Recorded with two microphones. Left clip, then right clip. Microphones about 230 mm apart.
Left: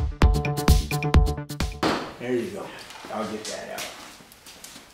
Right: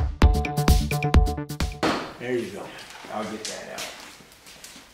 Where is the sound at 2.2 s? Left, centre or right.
Centre.